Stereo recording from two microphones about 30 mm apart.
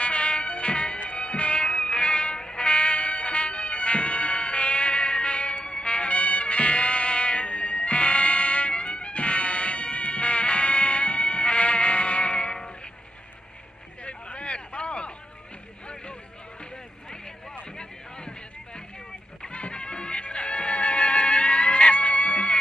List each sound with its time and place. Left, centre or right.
0.0 s music: left
14.0 s a sound: left
19.5 s music: left